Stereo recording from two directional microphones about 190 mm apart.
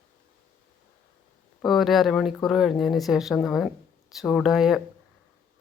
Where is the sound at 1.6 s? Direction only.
Centre (ahead or behind).